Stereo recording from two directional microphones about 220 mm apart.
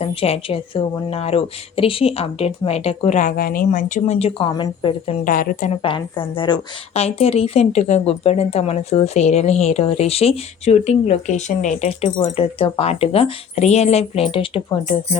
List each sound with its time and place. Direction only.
0.0 s a woman's voice: 25° left (ahead or behind)
5.2 s a woman's voice: 40° left (ahead or behind)
5.8 s a woman's voice: 25° left (ahead or behind)